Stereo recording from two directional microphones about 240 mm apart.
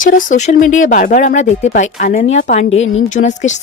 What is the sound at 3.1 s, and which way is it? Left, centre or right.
Speech, left.